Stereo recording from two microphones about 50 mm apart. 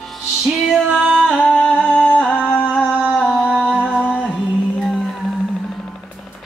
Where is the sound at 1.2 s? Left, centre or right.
Centre.